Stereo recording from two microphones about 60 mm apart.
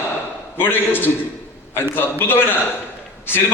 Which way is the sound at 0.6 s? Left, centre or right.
Left.